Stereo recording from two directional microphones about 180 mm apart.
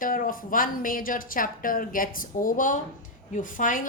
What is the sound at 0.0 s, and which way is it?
A woman's voice, 50° left (ahead or behind).